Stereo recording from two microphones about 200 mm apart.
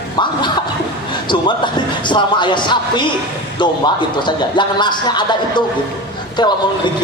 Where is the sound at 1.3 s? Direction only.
25° left (ahead or behind).